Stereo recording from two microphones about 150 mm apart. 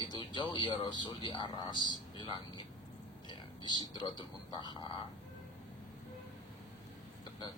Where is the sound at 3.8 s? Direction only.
30° left (ahead or behind).